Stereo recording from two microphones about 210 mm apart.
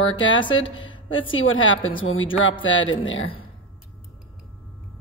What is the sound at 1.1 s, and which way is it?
Speech, 70° left (ahead or behind).